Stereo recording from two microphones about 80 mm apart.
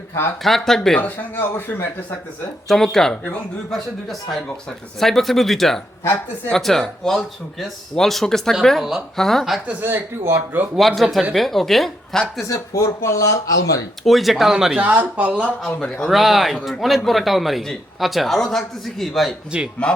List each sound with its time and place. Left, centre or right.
0.4 s a man's voice: centre
1.5 s speech: left
2.6 s a man's voice: centre
9.6 s speech: right
10.8 s a man's voice: centre
12.5 s speech: left
14.0 s a man's voice: centre
14.8 s speech: centre
15.8 s a man's voice: centre
19.5 s speech: centre